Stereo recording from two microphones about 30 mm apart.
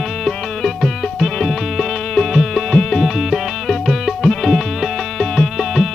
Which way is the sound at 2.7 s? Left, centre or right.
Left.